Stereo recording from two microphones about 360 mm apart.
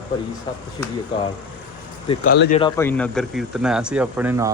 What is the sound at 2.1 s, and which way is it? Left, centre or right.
Speech, left.